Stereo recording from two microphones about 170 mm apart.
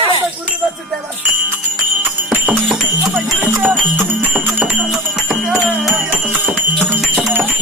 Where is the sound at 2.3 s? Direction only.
Centre (ahead or behind).